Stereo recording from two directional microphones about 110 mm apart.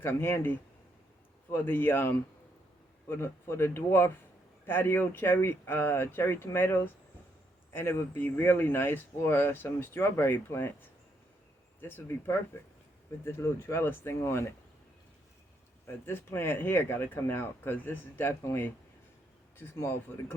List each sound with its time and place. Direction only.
0.0 s speech: 20° left (ahead or behind)
16.0 s speech: 20° left (ahead or behind)